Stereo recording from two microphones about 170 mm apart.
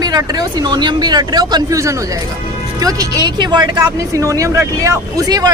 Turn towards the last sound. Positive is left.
turn(degrees=-20)  # may be behind; listen again after turning